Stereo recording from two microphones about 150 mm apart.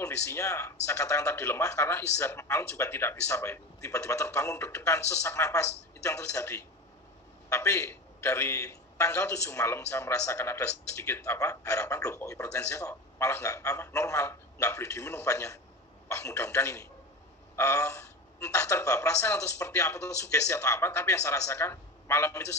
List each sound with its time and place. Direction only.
0.0 s a man's voice: 20° left (ahead or behind)